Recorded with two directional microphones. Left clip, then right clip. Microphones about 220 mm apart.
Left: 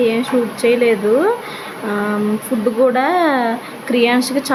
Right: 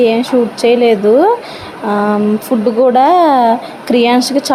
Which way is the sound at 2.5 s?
10° right (ahead or behind).